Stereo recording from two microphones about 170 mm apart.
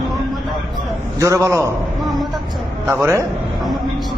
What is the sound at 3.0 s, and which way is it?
Speech, 15° right (ahead or behind).